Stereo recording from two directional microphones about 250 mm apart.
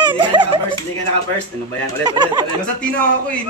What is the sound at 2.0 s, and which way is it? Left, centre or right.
Speech, centre.